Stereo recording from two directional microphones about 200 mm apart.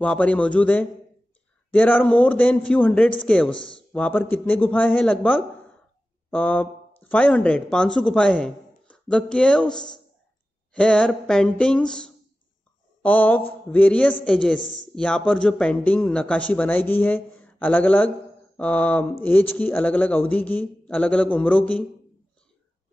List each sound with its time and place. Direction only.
0.0 s a man's voice: 5° left (ahead or behind)